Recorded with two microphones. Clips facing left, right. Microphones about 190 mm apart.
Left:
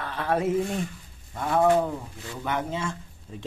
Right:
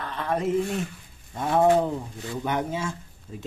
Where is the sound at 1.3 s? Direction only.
20° right (ahead or behind).